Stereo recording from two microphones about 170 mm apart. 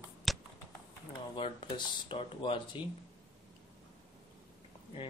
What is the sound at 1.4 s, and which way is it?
Speech, 30° left (ahead or behind).